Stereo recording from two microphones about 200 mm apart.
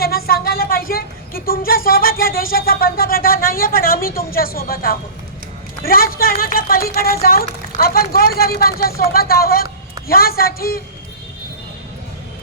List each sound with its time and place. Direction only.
0.0 s speech: 50° left (ahead or behind)